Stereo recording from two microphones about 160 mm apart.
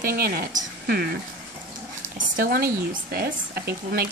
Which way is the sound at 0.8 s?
75° right (ahead or behind).